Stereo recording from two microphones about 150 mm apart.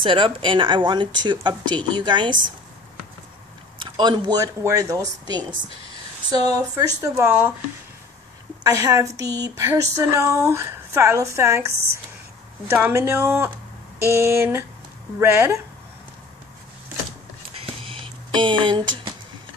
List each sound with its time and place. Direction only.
0.0 s speech: 35° right (ahead or behind)
3.8 s speech: 30° right (ahead or behind)
7.0 s speech: 15° right (ahead or behind)
8.6 s speech: 25° right (ahead or behind)
17.6 s a sound: 35° right (ahead or behind)